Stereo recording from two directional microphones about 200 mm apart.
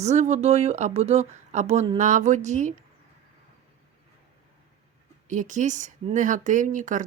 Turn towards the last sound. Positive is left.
turn(degrees=-40)  # may be behind; listen again after turning